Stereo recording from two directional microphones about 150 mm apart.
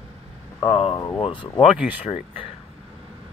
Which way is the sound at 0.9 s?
25° left (ahead or behind).